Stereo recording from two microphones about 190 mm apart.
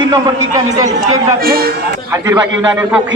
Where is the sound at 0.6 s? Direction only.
20° right (ahead or behind).